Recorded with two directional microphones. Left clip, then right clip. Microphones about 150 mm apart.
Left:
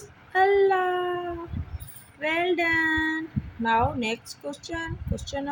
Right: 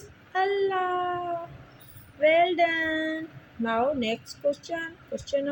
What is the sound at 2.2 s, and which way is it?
Child singing, 25° left (ahead or behind).